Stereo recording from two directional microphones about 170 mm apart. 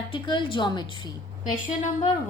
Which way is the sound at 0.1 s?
30° left (ahead or behind).